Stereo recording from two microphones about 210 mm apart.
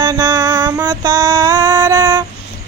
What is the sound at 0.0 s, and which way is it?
Music, 15° right (ahead or behind).